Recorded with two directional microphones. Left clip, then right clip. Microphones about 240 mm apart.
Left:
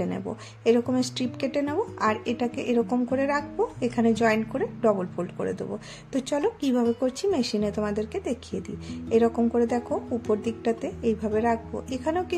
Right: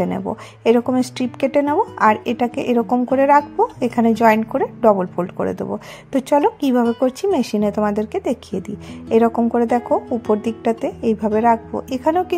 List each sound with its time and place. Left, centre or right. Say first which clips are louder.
0.0 s speech: right 9 dB; right